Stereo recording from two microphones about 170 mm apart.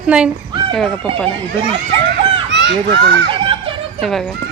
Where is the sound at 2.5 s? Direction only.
90° right.